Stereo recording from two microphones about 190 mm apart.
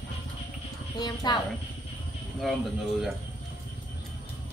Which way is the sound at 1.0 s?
20° left (ahead or behind).